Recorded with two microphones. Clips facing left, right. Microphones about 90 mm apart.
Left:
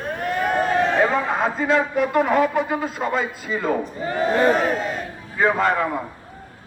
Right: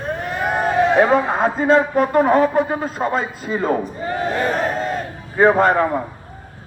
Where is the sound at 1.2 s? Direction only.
40° right (ahead or behind).